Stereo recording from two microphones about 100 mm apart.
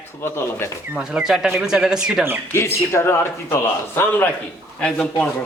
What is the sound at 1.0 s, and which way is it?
Speech, 5° right (ahead or behind).